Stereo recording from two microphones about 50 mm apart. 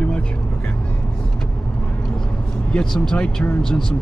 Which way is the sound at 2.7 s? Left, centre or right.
Centre.